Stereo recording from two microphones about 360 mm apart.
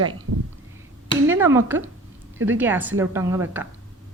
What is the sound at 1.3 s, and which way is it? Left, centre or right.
A woman's voice, centre.